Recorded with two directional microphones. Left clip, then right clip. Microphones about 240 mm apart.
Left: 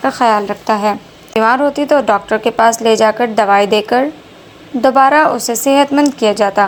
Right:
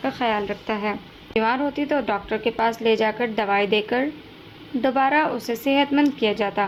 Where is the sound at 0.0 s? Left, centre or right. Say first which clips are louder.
Left 11 dB; left.